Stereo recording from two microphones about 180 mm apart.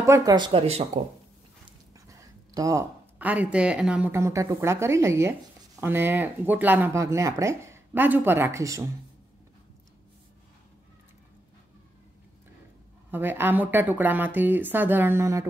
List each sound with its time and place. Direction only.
0.0 s speech: 20° right (ahead or behind)
0.5 s speech: 35° right (ahead or behind)
2.0 s a sound: 20° right (ahead or behind)
3.2 s speech: 10° right (ahead or behind)
13.1 s speech: 10° right (ahead or behind)